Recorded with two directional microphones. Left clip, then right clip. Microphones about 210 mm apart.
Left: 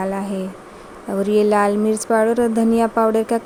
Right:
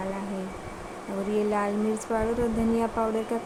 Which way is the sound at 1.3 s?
45° left (ahead or behind).